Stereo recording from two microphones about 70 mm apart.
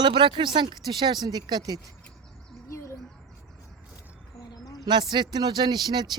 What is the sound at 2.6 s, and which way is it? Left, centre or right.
Bird, left.